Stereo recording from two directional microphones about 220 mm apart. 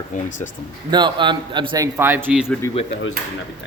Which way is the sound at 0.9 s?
20° right (ahead or behind).